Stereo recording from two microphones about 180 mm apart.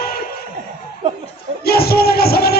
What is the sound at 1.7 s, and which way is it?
Music, 60° left (ahead or behind).